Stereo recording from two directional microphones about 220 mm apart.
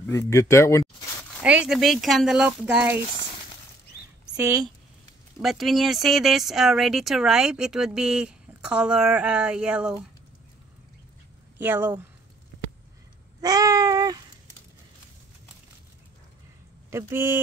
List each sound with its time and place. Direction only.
0.0 s speech: 10° left (ahead or behind)
1.4 s speech: 5° right (ahead or behind)
5.4 s speech: centre (ahead or behind)
11.5 s speech: 10° right (ahead or behind)
13.4 s babbling: 15° right (ahead or behind)
16.9 s speech: 10° right (ahead or behind)